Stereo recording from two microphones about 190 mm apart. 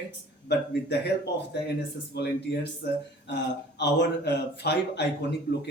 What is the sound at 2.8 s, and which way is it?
Speech, 65° left (ahead or behind).